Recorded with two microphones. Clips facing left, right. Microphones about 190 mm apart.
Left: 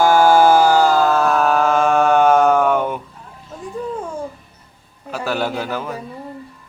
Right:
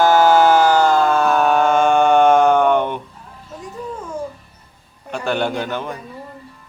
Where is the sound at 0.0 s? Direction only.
10° left (ahead or behind).